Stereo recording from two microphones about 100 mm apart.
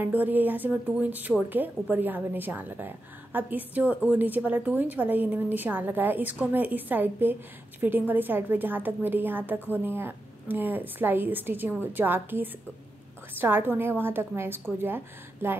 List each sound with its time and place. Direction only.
0.0 s a woman's voice: 15° right (ahead or behind)